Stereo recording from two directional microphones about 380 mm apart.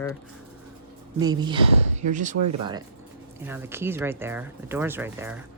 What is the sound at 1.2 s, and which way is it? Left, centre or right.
Speech, centre.